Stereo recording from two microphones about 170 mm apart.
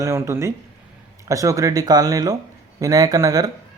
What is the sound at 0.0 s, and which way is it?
Speech, 15° right (ahead or behind).